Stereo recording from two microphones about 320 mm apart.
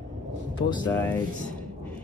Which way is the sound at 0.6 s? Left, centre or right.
Centre.